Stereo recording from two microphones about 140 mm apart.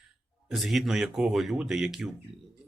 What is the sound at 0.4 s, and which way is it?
Speech, centre (ahead or behind).